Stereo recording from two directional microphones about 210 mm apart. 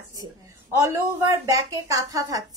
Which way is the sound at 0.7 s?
15° right (ahead or behind).